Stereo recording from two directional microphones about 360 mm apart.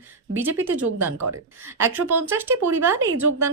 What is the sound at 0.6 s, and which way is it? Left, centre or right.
Speech, centre.